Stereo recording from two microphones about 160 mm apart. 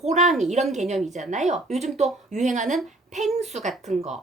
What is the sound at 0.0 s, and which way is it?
A woman's voice, 45° right (ahead or behind).